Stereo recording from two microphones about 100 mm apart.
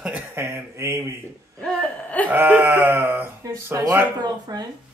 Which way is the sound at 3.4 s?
35° right (ahead or behind).